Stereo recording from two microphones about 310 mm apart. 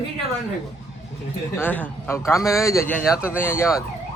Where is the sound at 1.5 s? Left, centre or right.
Centre.